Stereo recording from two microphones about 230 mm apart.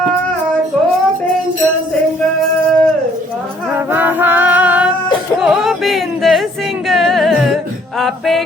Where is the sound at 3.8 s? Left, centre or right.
Centre.